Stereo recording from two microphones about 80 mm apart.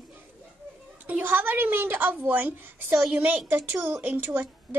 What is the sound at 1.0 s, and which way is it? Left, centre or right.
A woman's voice, right.